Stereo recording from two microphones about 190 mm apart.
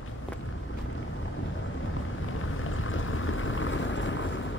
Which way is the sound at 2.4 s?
90° left.